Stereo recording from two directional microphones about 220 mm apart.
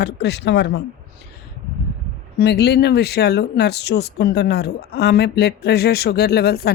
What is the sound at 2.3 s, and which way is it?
Speech, 50° left (ahead or behind).